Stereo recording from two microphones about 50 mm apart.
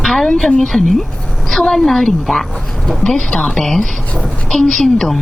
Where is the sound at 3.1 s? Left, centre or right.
Left.